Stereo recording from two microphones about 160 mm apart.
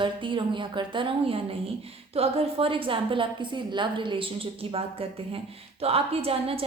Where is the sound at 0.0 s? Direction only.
30° right (ahead or behind).